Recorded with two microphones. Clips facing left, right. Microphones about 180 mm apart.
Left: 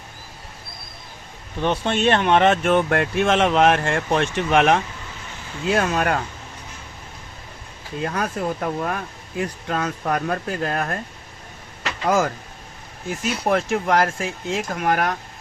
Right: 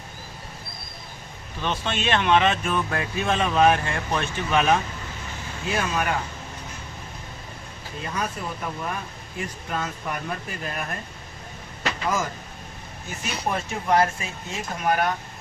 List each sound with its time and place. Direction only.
1.6 s speech: 60° left (ahead or behind)
8.0 s speech: 60° left (ahead or behind)
12.0 s speech: 70° left (ahead or behind)
13.1 s speech: 80° left